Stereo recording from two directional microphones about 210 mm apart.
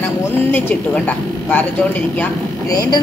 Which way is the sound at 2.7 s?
15° left (ahead or behind).